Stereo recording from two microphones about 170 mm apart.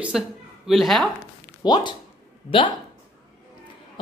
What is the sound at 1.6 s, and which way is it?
Speech, 25° left (ahead or behind).